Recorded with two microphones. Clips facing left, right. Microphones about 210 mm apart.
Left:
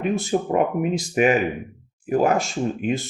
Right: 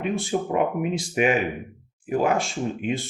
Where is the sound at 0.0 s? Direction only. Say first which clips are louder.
Left 3 dB; 40° left (ahead or behind).